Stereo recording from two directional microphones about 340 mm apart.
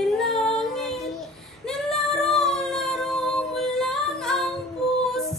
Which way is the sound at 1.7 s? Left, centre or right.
Centre.